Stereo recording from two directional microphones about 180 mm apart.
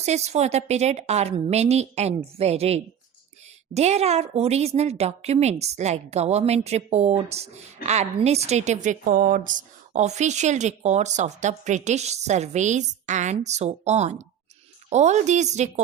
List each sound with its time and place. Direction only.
0.0 s a woman's voice: 35° right (ahead or behind)